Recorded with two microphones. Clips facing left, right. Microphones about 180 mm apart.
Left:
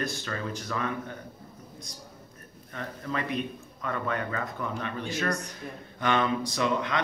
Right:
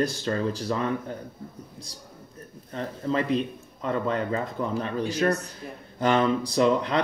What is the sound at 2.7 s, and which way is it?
Speech, 30° right (ahead or behind).